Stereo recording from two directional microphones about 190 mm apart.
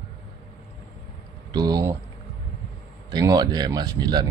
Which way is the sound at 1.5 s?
20° right (ahead or behind).